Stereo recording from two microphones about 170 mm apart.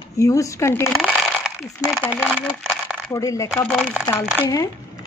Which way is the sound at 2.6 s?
5° left (ahead or behind).